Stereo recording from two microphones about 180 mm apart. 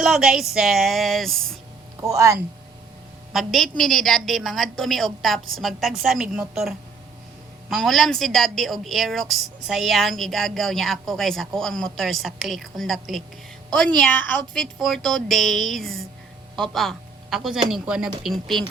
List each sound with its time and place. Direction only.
0.0 s a woman's voice: 5° right (ahead or behind)
2.0 s speech: 15° right (ahead or behind)
3.3 s a woman's voice: centre (ahead or behind)